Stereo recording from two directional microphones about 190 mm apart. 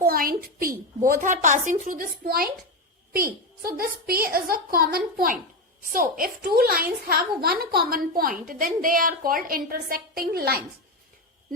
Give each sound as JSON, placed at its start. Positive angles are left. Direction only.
{"t": 0.0, "sound": "a woman's voice", "side_deg": -50}